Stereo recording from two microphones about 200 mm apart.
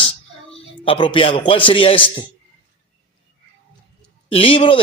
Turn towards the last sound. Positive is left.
turn(degrees=25)  # may be behind; listen again after turning